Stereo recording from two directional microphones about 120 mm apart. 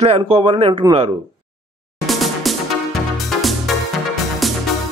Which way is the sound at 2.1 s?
Centre (ahead or behind).